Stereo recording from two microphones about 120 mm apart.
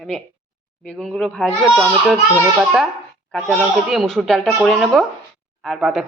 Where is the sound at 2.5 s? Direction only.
5° right (ahead or behind).